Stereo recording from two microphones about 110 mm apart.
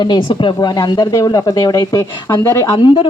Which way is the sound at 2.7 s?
55° left (ahead or behind).